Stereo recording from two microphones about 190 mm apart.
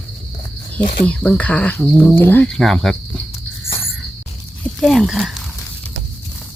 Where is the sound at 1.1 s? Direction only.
5° left (ahead or behind).